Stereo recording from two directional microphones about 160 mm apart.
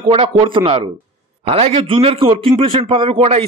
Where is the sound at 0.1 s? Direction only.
35° right (ahead or behind).